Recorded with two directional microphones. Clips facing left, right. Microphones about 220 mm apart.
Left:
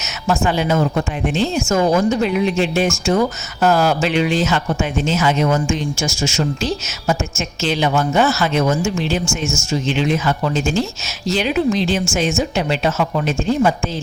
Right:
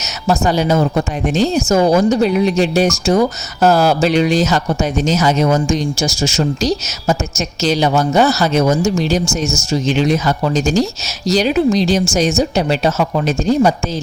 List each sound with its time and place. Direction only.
0.0 s speech: 40° right (ahead or behind)